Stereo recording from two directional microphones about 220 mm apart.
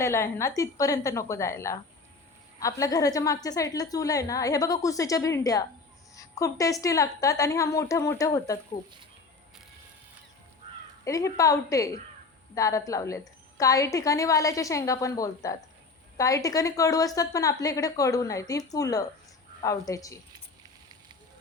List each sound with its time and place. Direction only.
0.0 s a woman's voice: 10° left (ahead or behind)
11.0 s a woman's voice: 15° left (ahead or behind)